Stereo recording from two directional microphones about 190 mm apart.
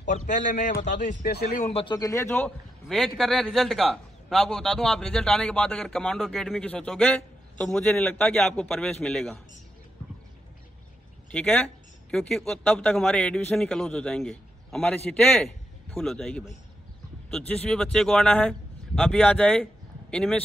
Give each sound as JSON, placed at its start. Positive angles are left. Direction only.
{"t": 0.1, "sound": "a man's voice", "side_deg": 40}
{"t": 1.2, "sound": "speech", "side_deg": 60}
{"t": 1.6, "sound": "a man's voice", "side_deg": 30}
{"t": 2.0, "sound": "a man's voice", "side_deg": 15}
{"t": 11.3, "sound": "a man's voice", "side_deg": 5}